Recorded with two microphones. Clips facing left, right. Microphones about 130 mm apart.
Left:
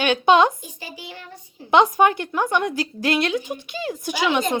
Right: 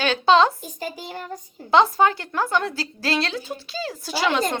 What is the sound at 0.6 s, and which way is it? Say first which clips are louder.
Speech: right 5 dB; 45° right (ahead or behind).